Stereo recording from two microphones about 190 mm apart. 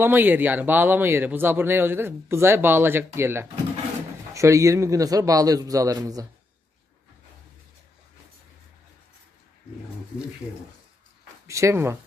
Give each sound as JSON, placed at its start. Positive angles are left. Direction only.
{"t": 0.0, "sound": "speech", "side_deg": -10}
{"t": 11.4, "sound": "speech", "side_deg": -15}